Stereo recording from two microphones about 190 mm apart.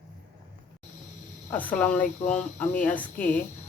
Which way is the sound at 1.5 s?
10° left (ahead or behind).